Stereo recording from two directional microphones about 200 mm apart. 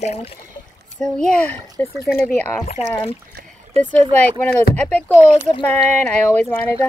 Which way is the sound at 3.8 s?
30° right (ahead or behind).